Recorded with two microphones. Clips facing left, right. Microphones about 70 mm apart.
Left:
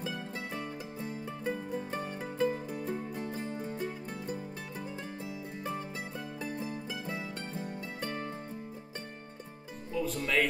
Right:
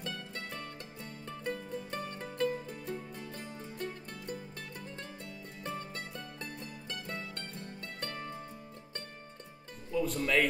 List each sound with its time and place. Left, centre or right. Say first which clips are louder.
0.0 s music: left 4 dB; centre
9.9 s speech: right 1 dB; centre